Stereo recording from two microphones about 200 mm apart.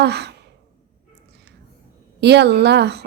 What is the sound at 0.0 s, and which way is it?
Speech, 55° right (ahead or behind).